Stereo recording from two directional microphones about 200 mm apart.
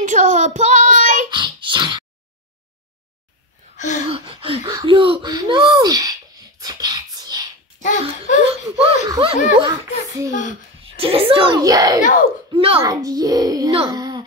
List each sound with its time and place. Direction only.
0.0 s child singing: 40° right (ahead or behind)
1.3 s a sound: 25° right (ahead or behind)
3.7 s a sound: 35° left (ahead or behind)
4.1 s speech: 30° right (ahead or behind)
6.6 s whispering: 20° right (ahead or behind)
7.8 s a sound: 40° left (ahead or behind)
9.1 s a child's voice: 25° right (ahead or behind)
10.3 s a child's voice: 40° left (ahead or behind)
10.8 s a child's voice: 30° right (ahead or behind)
12.0 s a child's voice: 40° left (ahead or behind)
12.5 s speech: 30° right (ahead or behind)
12.8 s a child's voice: 15° right (ahead or behind)